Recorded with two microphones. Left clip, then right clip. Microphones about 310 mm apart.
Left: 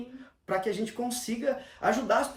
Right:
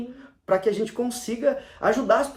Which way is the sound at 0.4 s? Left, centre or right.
Centre.